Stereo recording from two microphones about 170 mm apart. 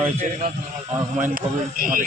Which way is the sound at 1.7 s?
55° right (ahead or behind).